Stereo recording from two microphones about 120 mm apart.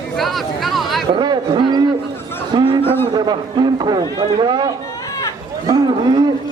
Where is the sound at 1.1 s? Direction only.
40° right (ahead or behind).